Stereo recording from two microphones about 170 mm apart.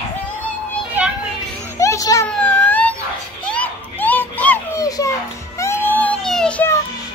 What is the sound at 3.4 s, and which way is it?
Children playing, 10° left (ahead or behind).